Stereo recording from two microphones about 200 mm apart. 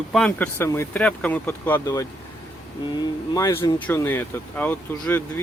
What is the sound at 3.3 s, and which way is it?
Speech, 15° left (ahead or behind).